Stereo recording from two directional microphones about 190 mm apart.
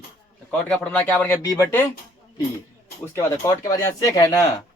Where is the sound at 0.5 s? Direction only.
5° left (ahead or behind).